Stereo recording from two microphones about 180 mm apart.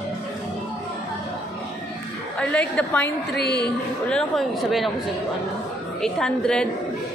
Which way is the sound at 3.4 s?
65° left (ahead or behind).